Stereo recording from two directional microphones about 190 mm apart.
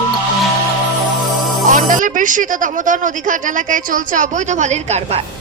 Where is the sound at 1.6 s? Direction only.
45° right (ahead or behind).